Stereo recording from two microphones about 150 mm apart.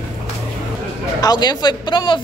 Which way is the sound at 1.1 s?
25° left (ahead or behind).